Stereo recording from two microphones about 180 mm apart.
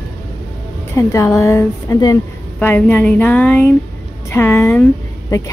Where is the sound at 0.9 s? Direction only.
15° left (ahead or behind).